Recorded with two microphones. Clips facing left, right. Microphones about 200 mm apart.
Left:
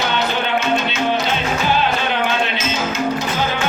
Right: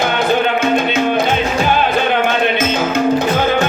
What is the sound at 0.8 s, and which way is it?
Music, 55° right (ahead or behind).